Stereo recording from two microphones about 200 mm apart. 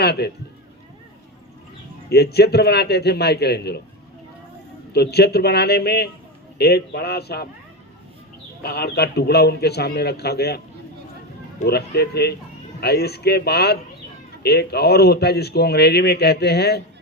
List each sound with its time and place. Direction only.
0.0 s a man's voice: 55° left (ahead or behind)
2.0 s speech: 55° left (ahead or behind)
4.9 s speech: 55° left (ahead or behind)
8.6 s speech: 55° left (ahead or behind)
11.6 s speech: 55° left (ahead or behind)